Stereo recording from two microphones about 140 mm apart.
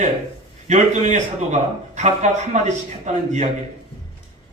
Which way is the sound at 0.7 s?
60° right (ahead or behind).